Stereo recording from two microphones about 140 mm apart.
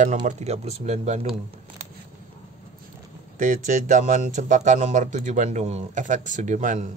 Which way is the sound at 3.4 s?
65° right (ahead or behind).